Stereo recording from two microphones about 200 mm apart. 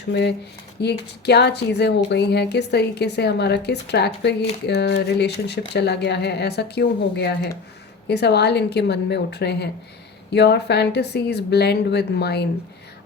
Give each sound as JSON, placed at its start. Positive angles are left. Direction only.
{"t": 0.1, "sound": "speech", "side_deg": 60}